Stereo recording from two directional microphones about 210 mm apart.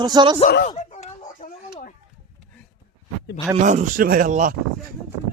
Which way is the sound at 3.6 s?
35° right (ahead or behind).